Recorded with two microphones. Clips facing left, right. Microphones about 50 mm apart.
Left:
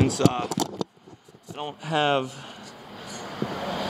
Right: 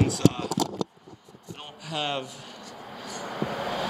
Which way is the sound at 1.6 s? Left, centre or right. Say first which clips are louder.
Left 8 dB; left.